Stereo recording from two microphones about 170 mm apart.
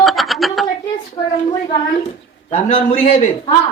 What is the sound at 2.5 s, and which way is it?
Speech, 35° left (ahead or behind).